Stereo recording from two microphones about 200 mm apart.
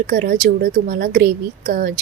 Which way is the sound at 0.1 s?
50° right (ahead or behind).